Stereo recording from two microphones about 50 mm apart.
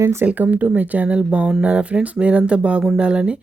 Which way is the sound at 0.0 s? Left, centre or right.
Right.